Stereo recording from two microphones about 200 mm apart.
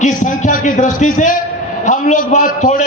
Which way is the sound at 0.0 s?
40° left (ahead or behind).